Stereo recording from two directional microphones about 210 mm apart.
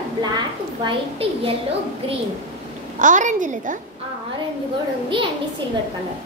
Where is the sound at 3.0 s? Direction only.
35° right (ahead or behind).